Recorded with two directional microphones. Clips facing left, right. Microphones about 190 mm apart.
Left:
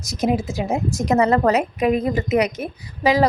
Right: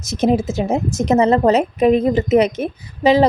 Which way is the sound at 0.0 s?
25° right (ahead or behind).